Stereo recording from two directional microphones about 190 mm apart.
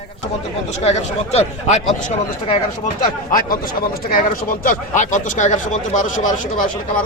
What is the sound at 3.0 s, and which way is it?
Speech, 45° left (ahead or behind).